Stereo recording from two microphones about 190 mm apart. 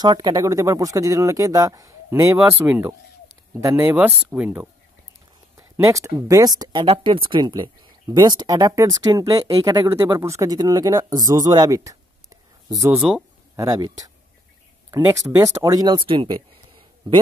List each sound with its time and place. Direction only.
0.0 s speech: 20° right (ahead or behind)
12.9 s speech: 5° right (ahead or behind)
13.6 s speech: 20° right (ahead or behind)